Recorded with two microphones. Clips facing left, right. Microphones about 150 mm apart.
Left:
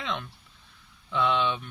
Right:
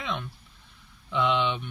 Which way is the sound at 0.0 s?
10° right (ahead or behind).